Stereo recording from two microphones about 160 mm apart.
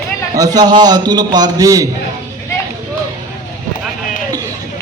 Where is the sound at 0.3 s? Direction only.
25° right (ahead or behind).